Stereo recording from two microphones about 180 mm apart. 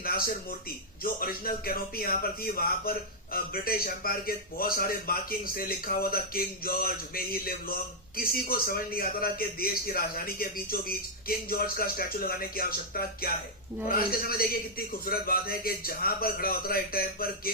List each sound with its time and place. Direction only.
1.0 s a man's voice: 55° left (ahead or behind)